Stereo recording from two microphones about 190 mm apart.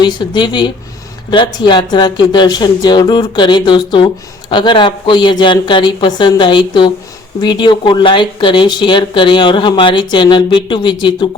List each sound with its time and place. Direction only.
0.0 s speech: 25° left (ahead or behind)